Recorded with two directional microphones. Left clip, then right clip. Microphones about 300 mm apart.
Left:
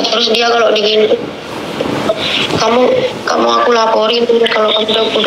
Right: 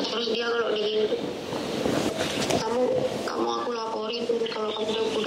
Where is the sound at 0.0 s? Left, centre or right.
Centre; by 0.9 s left.